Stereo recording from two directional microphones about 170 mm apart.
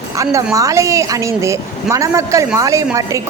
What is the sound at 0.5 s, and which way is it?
A woman's voice, 20° right (ahead or behind).